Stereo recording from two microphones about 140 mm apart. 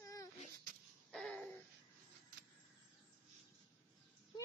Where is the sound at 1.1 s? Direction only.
Centre (ahead or behind).